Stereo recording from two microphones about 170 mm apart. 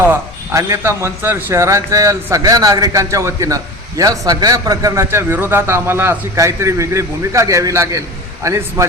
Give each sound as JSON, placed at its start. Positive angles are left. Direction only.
{"t": 0.1, "sound": "a man's voice", "side_deg": -15}